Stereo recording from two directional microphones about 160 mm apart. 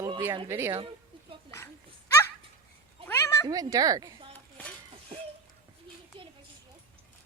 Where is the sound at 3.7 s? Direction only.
25° right (ahead or behind).